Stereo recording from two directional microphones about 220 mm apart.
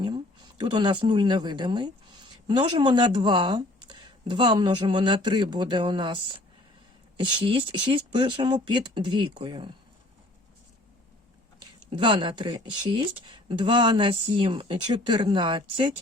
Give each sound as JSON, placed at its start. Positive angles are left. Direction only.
{"t": 0.6, "sound": "speech", "side_deg": -20}
{"t": 7.2, "sound": "speech", "side_deg": -25}
{"t": 11.9, "sound": "speech", "side_deg": -20}